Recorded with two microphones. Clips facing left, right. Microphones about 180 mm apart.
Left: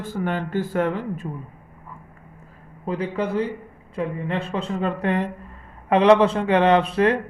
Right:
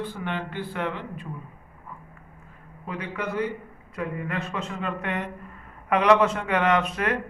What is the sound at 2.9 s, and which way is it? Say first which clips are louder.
Speech: left 7 dB; 30° left (ahead or behind).